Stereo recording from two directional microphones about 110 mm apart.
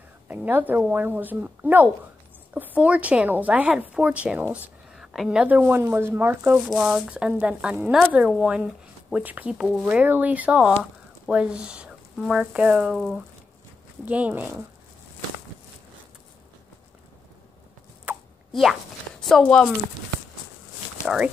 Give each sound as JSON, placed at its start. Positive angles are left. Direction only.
{"t": 0.3, "sound": "a woman's voice", "side_deg": -15}
{"t": 6.5, "sound": "a woman's voice", "side_deg": -5}
{"t": 14.0, "sound": "a woman's voice", "side_deg": -15}
{"t": 18.1, "sound": "plop", "side_deg": -15}
{"t": 18.5, "sound": "a sound", "side_deg": 0}